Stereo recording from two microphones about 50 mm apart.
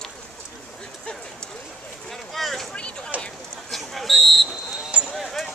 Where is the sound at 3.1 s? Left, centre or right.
Right.